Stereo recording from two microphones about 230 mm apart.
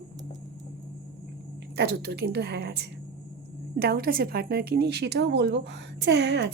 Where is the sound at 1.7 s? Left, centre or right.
Right.